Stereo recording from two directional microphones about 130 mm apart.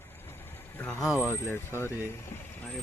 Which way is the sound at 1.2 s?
20° left (ahead or behind).